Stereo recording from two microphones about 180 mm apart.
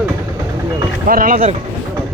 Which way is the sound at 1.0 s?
50° right (ahead or behind).